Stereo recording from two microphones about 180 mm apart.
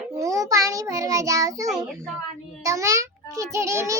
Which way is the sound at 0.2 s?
20° right (ahead or behind).